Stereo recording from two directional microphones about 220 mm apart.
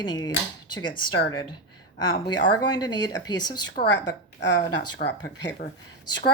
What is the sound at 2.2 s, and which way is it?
Speech, 20° left (ahead or behind).